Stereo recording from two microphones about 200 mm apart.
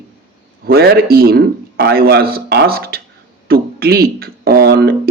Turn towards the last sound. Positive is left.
turn(degrees=-55)  # may be behind; listen again after turning